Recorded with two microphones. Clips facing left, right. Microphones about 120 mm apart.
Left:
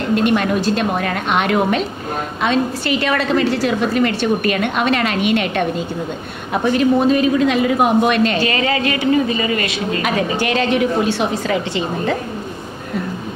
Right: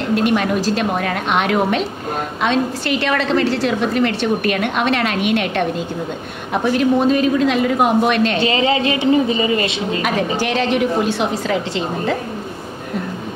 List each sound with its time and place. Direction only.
0.0 s a woman's voice: centre (ahead or behind)
8.4 s a woman's voice: 20° right (ahead or behind)
10.0 s a woman's voice: centre (ahead or behind)